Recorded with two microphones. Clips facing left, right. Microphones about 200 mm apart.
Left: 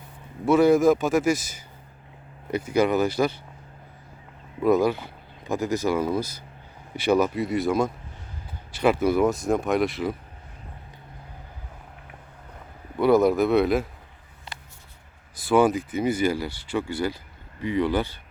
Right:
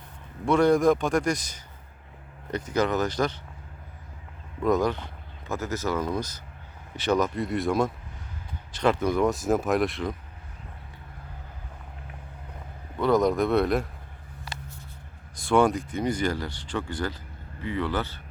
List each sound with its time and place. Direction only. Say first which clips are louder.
0.4 s speech: left 3 dB; 5° left (ahead or behind)
4.6 s speech: left 3 dB; 10° left (ahead or behind)
13.0 s speech: left 4 dB; 10° left (ahead or behind)
14.5 s a sound: right 2 dB; 25° left (ahead or behind)
15.4 s speech: left 2 dB; 5° left (ahead or behind)